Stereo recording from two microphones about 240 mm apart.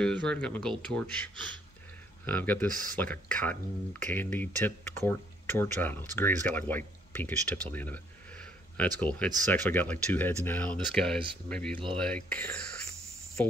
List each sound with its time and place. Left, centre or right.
0.3 s speech: centre
2.2 s speech: centre